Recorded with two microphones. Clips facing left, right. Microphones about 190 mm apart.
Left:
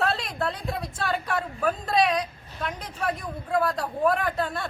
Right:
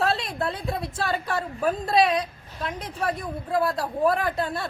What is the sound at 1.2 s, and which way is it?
A woman's voice, 25° right (ahead or behind).